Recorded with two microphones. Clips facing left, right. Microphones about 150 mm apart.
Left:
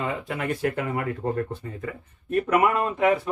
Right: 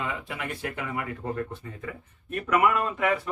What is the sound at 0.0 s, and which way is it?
Speech, 40° left (ahead or behind).